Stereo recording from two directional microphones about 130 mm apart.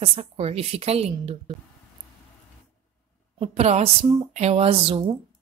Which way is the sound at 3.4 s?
55° right (ahead or behind).